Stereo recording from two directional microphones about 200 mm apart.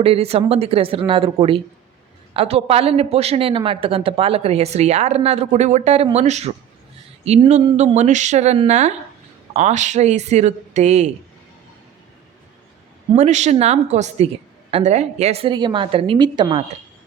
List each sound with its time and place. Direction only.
0.0 s a woman's voice: 30° right (ahead or behind)
13.1 s a woman's voice: 35° right (ahead or behind)